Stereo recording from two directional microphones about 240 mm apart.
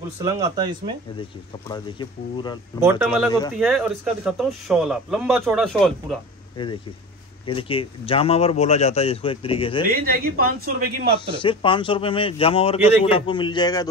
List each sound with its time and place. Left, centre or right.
0.2 s speech: centre
1.7 s speech: centre
2.8 s speech: centre
3.3 s speech: centre
3.5 s speech: centre
7.4 s speech: left
9.8 s a man's voice: right
11.1 s speech: left